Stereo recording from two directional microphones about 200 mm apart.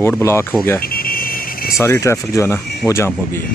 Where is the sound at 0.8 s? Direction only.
45° left (ahead or behind).